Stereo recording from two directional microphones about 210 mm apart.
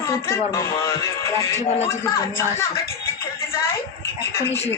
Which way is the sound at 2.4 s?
15° left (ahead or behind).